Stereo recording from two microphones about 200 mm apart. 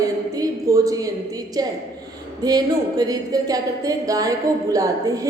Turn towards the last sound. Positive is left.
turn(degrees=-15)  # may be behind; listen again after turning